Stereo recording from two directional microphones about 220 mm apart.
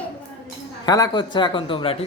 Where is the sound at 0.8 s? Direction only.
15° left (ahead or behind).